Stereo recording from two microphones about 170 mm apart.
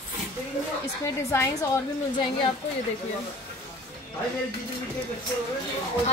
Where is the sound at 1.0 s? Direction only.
20° left (ahead or behind).